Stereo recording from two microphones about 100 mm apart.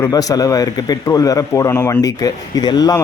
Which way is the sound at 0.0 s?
35° left (ahead or behind).